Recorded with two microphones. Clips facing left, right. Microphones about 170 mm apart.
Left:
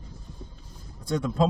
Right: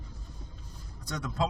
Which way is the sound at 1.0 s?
25° left (ahead or behind).